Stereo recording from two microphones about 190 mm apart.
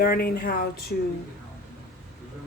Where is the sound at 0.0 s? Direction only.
55° left (ahead or behind).